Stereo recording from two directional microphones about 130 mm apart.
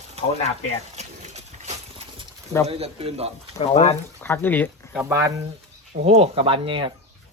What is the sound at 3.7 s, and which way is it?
Speech, 55° left (ahead or behind).